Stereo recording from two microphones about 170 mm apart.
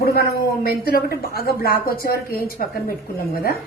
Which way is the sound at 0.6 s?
65° left (ahead or behind).